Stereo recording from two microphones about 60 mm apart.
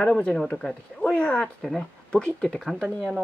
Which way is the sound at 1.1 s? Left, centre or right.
Left.